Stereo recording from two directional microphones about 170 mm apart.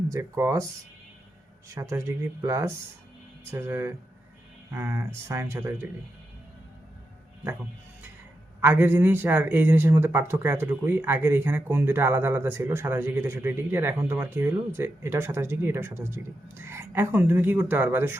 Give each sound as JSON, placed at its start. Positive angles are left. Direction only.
{"t": 0.1, "sound": "a man's voice", "side_deg": -15}
{"t": 1.7, "sound": "a man's voice", "side_deg": -15}
{"t": 7.4, "sound": "a man's voice", "side_deg": -10}